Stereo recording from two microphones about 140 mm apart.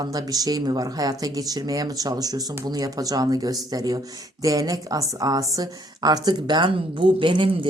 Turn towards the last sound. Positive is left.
turn(degrees=-35)  # may be behind; listen again after turning